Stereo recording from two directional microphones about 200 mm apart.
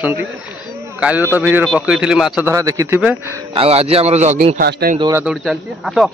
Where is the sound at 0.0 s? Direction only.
10° right (ahead or behind).